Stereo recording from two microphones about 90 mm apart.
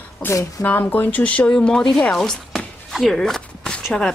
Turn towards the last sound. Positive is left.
turn(degrees=5)  # may be behind; listen again after turning